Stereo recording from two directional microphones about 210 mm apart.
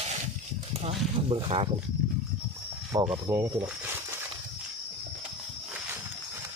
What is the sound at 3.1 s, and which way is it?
Speech, 15° right (ahead or behind).